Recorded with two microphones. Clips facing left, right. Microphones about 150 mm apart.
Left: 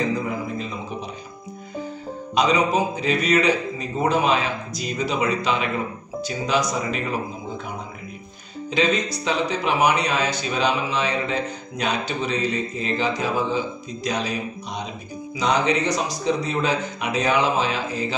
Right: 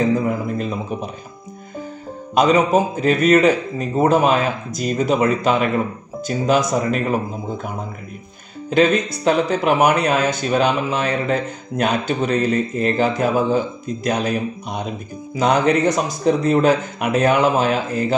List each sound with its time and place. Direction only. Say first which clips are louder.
2.3 s speech: right 5 dB; 50° right (ahead or behind)
8.6 s speech: right 6 dB; 55° right (ahead or behind)